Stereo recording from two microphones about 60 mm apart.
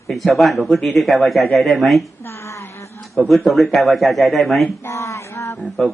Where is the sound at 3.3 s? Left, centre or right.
Centre.